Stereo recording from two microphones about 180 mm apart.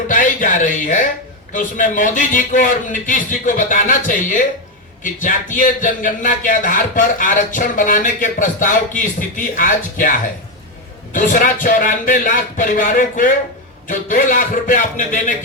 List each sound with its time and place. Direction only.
0.1 s a man's voice: 45° left (ahead or behind)